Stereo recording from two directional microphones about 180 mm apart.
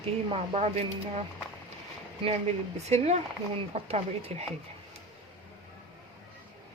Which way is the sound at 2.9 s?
40° right (ahead or behind).